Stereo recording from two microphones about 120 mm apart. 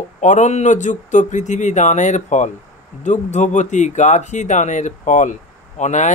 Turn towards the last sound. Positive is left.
turn(degrees=85)